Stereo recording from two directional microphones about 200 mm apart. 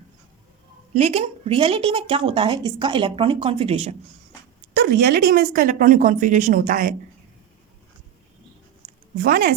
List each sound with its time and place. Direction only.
0.9 s speech: 30° right (ahead or behind)
4.7 s speech: 45° right (ahead or behind)
9.1 s speech: 45° right (ahead or behind)